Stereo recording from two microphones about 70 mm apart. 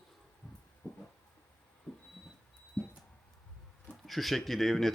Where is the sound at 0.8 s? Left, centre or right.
Left.